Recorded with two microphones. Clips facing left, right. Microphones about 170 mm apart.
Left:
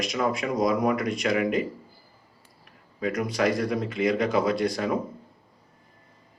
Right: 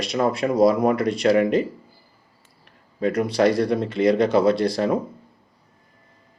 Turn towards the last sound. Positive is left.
turn(degrees=-35)  # may be behind; listen again after turning